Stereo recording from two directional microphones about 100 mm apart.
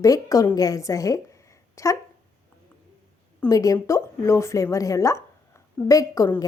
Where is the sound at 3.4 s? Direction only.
35° left (ahead or behind).